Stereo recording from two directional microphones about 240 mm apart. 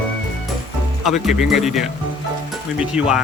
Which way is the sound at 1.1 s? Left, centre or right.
Centre.